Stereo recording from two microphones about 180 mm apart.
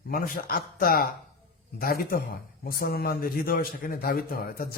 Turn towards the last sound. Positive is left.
turn(degrees=55)  # may be behind; listen again after turning